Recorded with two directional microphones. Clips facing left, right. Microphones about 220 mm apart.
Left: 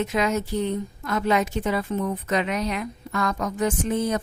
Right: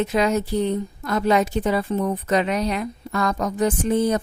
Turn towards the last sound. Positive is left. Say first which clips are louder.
# right 4 dB
turn(degrees=-35)  # may be behind; listen again after turning